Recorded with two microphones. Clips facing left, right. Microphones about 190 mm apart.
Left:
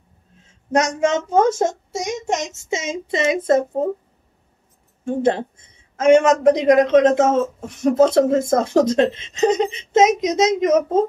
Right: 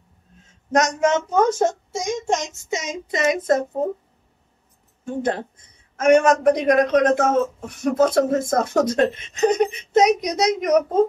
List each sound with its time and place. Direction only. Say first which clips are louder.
0.7 s speech: left 1 dB; 30° left (ahead or behind)
5.0 s speech: left 5 dB; 25° left (ahead or behind)